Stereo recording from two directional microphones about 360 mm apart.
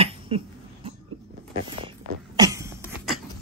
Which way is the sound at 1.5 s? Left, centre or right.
Centre.